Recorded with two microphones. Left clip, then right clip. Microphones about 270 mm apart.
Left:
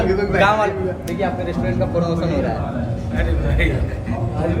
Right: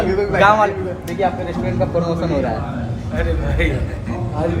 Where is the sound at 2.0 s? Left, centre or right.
Centre.